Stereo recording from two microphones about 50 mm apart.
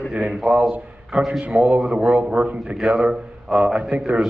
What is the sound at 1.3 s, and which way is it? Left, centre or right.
Speech, right.